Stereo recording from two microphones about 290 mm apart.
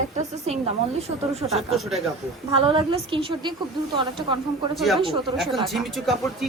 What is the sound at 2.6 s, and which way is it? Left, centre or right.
Speech, centre.